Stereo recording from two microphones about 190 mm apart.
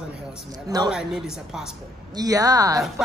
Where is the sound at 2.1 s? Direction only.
20° right (ahead or behind).